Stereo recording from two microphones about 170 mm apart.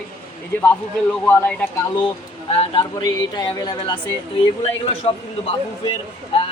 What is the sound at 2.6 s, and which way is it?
A man's voice, 30° left (ahead or behind).